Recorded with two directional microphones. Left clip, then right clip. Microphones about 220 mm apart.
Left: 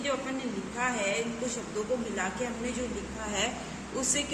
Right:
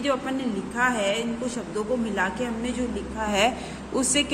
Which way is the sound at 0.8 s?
35° right (ahead or behind).